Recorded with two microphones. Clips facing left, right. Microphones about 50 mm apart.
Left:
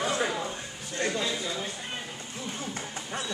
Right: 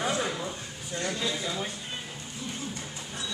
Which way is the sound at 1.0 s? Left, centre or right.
Left.